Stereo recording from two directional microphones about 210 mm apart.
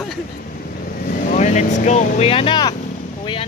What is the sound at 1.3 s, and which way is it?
Speech, 35° left (ahead or behind).